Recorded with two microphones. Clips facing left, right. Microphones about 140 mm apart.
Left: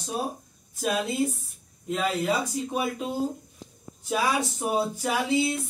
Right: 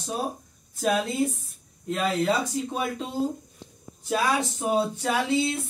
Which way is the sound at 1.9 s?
10° left (ahead or behind).